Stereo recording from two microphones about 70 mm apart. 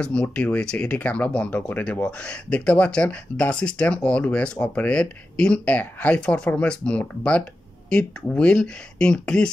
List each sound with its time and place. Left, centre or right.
0.0 s speech: centre